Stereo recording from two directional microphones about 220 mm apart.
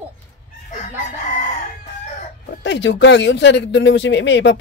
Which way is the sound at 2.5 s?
55° left (ahead or behind).